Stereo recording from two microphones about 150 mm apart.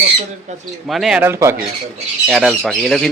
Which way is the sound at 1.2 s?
20° right (ahead or behind).